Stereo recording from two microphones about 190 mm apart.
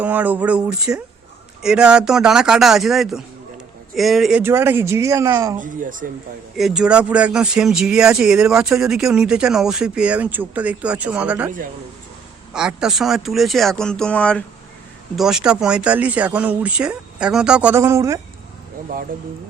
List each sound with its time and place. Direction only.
0.0 s speech: 10° right (ahead or behind)
5.5 s speech: 45° right (ahead or behind)
6.6 s speech: 5° right (ahead or behind)
12.5 s speech: 5° right (ahead or behind)